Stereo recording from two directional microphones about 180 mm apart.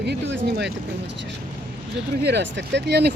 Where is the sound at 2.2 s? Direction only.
65° right (ahead or behind).